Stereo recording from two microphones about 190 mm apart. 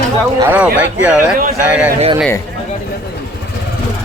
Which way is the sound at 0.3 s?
10° right (ahead or behind).